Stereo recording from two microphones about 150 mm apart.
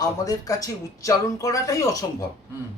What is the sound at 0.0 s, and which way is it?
Speech, 25° left (ahead or behind).